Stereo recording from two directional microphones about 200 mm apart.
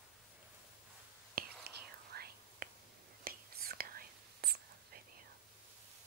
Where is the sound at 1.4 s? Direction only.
50° right (ahead or behind).